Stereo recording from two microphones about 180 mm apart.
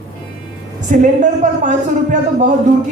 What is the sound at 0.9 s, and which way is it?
A man's voice, 45° right (ahead or behind).